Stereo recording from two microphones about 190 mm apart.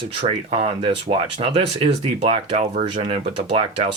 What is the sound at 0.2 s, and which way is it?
Speech, 30° right (ahead or behind).